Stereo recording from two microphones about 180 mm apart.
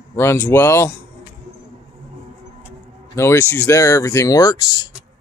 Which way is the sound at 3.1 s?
15° left (ahead or behind).